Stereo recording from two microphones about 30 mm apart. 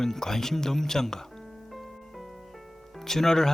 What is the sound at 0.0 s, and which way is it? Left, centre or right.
Speech, centre.